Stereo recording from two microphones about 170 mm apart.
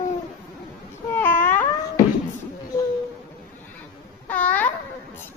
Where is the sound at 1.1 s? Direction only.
10° left (ahead or behind).